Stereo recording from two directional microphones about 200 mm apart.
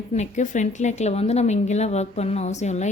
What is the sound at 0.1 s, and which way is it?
Speech, 35° left (ahead or behind).